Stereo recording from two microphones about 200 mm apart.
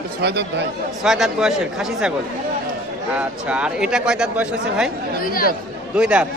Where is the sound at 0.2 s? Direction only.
55° right (ahead or behind).